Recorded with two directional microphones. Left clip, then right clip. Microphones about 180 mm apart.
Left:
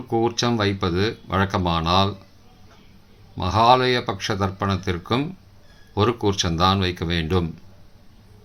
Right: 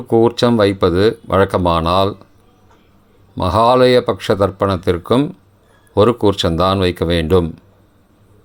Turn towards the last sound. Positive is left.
turn(degrees=-45)  # may be behind; listen again after turning